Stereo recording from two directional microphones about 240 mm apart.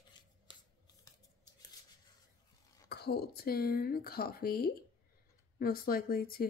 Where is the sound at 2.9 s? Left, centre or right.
Left.